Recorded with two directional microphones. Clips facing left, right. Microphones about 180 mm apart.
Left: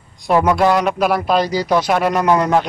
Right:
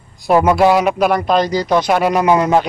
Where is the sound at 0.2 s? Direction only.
5° right (ahead or behind).